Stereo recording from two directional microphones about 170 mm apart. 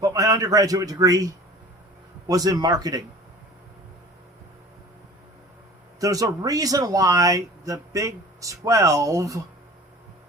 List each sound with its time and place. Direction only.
0.0 s a man's voice: 20° right (ahead or behind)
6.0 s speech: 20° right (ahead or behind)